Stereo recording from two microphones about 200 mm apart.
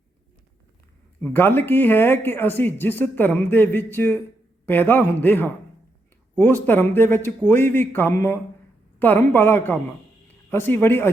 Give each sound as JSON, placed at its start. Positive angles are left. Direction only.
{"t": 1.2, "sound": "speech", "side_deg": 10}